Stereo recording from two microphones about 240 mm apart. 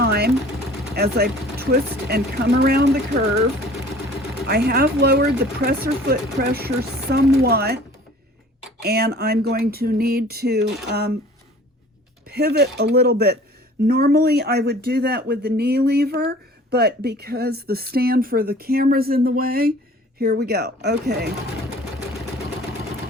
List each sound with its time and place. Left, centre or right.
0.9 s speech: right
4.4 s speech: right
8.8 s speech: right
12.3 s speech: right